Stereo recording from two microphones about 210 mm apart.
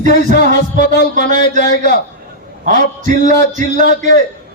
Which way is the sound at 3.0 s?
35° right (ahead or behind).